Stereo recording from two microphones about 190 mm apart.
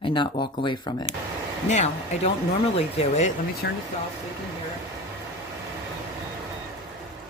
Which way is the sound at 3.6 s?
65° left (ahead or behind).